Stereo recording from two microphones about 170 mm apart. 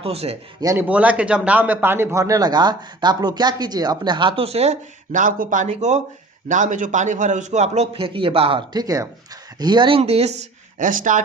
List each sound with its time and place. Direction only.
0.0 s a man's voice: 35° right (ahead or behind)
0.6 s speech: 20° right (ahead or behind)
0.9 s a man's voice: 10° right (ahead or behind); by 11.2 s 50° right (ahead or behind)